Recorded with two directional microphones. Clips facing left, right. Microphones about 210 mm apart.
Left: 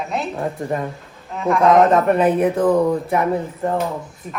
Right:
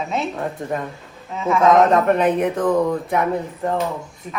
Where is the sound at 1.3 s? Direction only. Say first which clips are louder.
Left 1 dB; centre (ahead or behind).